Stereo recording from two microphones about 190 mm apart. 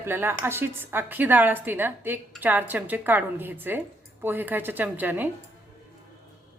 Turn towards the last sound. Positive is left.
turn(degrees=-10)  # may be behind; listen again after turning